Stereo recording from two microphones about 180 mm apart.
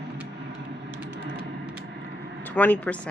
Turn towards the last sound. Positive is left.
turn(degrees=10)  # may be behind; listen again after turning